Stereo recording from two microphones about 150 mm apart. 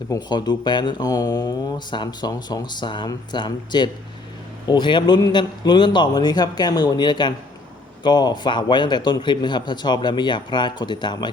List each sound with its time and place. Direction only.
0.1 s speech: 30° left (ahead or behind)